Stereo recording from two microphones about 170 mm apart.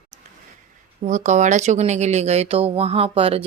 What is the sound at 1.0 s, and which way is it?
Speech, 45° right (ahead or behind).